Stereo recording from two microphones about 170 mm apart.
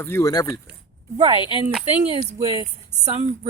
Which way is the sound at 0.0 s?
15° left (ahead or behind).